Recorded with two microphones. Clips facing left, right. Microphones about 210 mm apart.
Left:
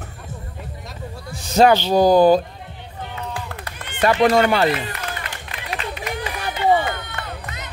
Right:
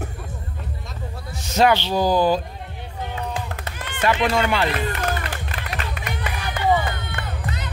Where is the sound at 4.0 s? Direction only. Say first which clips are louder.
Left 5 dB; 40° left (ahead or behind).